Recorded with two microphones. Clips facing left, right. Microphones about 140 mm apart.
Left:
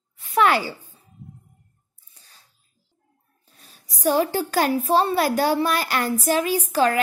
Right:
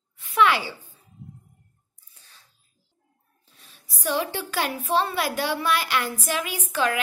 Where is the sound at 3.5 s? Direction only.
40° left (ahead or behind).